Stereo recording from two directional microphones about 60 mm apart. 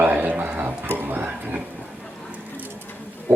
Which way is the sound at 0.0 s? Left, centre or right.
Right.